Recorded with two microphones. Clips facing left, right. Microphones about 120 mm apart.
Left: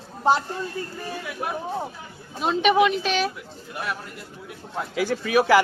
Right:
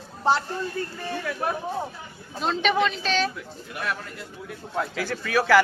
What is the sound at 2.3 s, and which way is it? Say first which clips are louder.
Speech: left 4 dB; 10° left (ahead or behind).